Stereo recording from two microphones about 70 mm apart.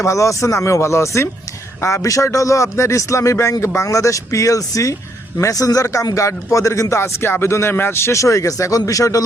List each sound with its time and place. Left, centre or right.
0.0 s speech: left